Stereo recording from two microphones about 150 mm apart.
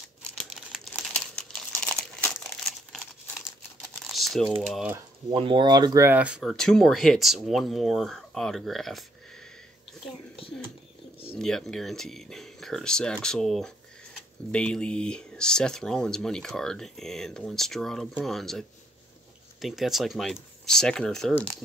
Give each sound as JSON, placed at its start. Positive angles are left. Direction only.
{"t": 0.4, "sound": "crumpling", "side_deg": 0}
{"t": 5.3, "sound": "speech", "side_deg": -35}
{"t": 6.0, "sound": "speech", "side_deg": -10}
{"t": 11.3, "sound": "speech", "side_deg": 5}